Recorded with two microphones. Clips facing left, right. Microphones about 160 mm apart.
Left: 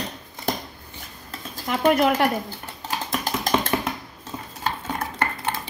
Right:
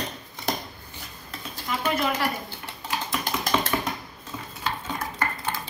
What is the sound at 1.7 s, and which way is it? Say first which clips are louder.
Speech: left 7 dB; 60° left (ahead or behind).